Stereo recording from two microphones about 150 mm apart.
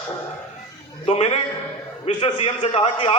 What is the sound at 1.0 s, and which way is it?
A man's voice, 45° left (ahead or behind).